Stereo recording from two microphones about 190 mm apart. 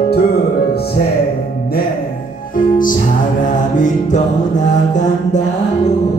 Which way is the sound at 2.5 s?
45° left (ahead or behind).